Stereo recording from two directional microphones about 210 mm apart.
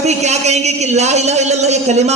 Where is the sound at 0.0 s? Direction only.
30° right (ahead or behind).